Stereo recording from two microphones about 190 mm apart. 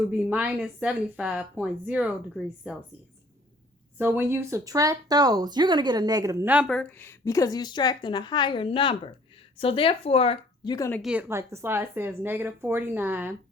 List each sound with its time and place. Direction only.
0.1 s speech: 5° right (ahead or behind)
3.9 s speech: 10° right (ahead or behind)
6.7 s a woman's voice: 5° left (ahead or behind)
11.0 s speech: 5° right (ahead or behind)